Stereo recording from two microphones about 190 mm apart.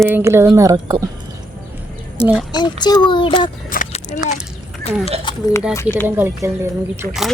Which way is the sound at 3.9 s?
40° left (ahead or behind).